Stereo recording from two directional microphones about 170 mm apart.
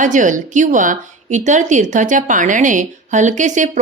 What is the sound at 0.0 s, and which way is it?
A woman's voice, 50° right (ahead or behind).